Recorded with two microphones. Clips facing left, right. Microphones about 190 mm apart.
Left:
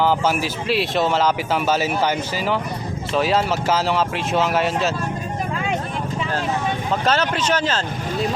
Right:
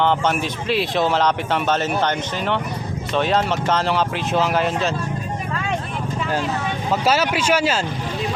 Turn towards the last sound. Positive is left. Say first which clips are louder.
# right 2 dB
turn(degrees=-10)  # may be behind; listen again after turning